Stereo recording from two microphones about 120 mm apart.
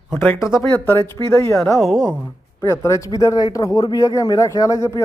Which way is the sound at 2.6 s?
25° left (ahead or behind).